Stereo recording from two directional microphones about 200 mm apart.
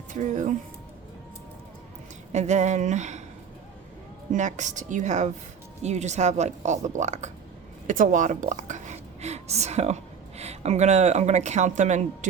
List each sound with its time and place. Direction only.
0.1 s speech: 35° right (ahead or behind)
2.3 s a woman's voice: 35° right (ahead or behind)
4.3 s a woman's voice: 40° right (ahead or behind)